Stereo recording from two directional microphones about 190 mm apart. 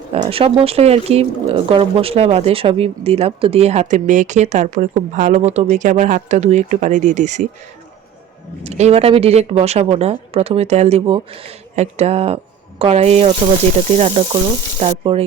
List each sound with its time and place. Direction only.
0.1 s speech: 30° right (ahead or behind)
8.6 s speech: 35° right (ahead or behind)